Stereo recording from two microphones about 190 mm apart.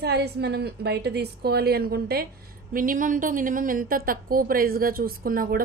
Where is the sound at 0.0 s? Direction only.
60° right (ahead or behind).